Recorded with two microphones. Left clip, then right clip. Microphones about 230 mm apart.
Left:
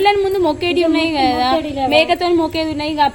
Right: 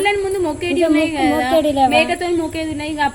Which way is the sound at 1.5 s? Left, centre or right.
Right.